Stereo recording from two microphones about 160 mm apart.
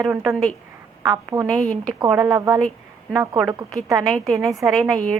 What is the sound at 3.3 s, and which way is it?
A woman's voice, centre (ahead or behind).